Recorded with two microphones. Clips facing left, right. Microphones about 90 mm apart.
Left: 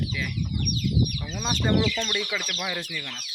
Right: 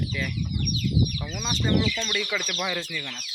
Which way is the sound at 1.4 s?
50° left (ahead or behind).